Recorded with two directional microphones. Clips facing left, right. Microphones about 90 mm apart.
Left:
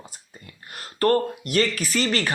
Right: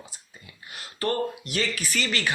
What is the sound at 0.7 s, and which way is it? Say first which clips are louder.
Speech: left 7 dB; 45° left (ahead or behind).